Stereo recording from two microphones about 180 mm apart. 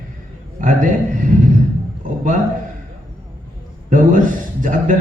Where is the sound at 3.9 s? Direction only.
45° right (ahead or behind).